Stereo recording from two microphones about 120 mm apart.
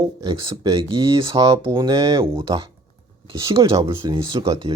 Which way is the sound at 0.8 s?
45° right (ahead or behind).